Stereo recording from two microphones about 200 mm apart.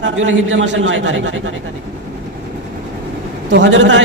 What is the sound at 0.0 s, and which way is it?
A man's voice, 80° right.